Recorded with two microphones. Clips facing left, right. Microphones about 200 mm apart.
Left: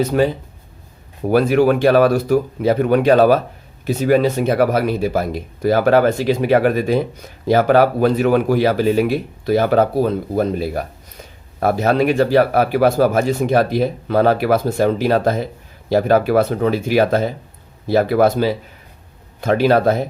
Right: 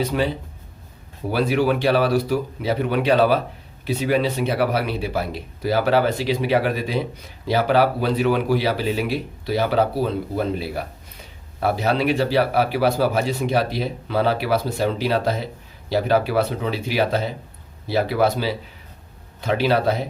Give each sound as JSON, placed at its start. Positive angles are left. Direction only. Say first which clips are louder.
{"t": 0.0, "sound": "speech", "louder": "left 6 dB", "side_deg": 45}
{"t": 1.3, "sound": "speech", "louder": "left 6 dB", "side_deg": 50}